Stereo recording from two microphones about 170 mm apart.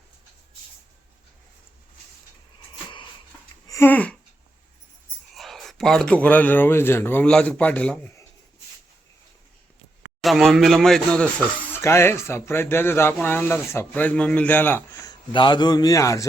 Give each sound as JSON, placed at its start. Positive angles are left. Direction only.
{"t": 3.7, "sound": "a sound", "side_deg": 15}
{"t": 5.3, "sound": "speech", "side_deg": 0}
{"t": 10.2, "sound": "speech", "side_deg": 0}
{"t": 15.1, "sound": "a man's voice", "side_deg": 25}